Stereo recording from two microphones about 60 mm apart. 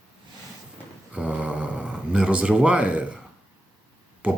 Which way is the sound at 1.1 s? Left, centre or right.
Right.